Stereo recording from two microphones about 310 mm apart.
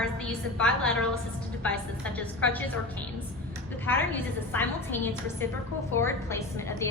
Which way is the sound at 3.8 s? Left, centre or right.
Centre.